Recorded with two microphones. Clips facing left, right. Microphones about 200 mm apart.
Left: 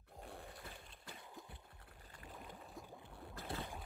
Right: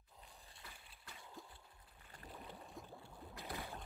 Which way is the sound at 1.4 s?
Centre (ahead or behind).